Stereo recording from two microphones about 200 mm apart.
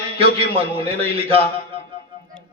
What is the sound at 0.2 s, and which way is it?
A man's voice, 30° right (ahead or behind).